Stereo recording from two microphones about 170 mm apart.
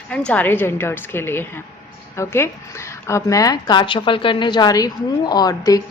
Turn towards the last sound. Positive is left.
turn(degrees=20)  # may be behind; listen again after turning